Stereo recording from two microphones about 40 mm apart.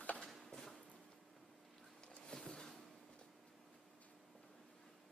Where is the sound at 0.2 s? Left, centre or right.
Centre.